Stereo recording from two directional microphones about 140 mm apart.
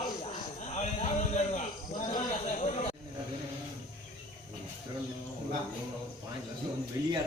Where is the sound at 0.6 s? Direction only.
55° left (ahead or behind).